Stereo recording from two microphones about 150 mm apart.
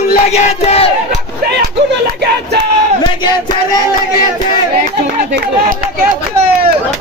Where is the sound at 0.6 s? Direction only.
45° left (ahead or behind).